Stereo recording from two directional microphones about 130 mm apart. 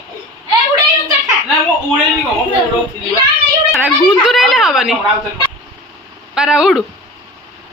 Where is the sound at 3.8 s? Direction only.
5° right (ahead or behind).